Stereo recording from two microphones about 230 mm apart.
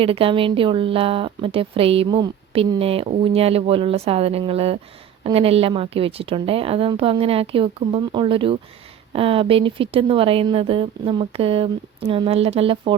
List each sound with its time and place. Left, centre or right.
0.0 s speech: right